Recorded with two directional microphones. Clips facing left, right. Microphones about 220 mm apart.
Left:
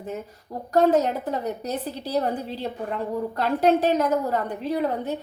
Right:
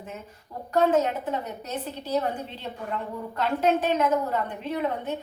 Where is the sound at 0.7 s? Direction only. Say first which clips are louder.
Left 3 dB; 40° left (ahead or behind).